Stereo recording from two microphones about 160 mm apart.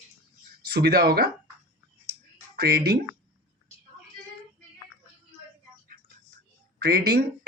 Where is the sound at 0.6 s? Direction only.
85° right.